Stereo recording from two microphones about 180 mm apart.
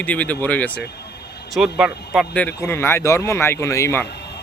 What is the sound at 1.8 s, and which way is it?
Speech, centre (ahead or behind).